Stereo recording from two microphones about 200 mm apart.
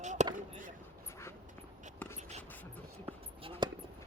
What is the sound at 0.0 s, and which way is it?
Basketball bounce, 35° right (ahead or behind).